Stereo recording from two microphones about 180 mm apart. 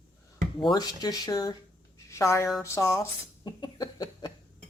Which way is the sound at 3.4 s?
20° left (ahead or behind).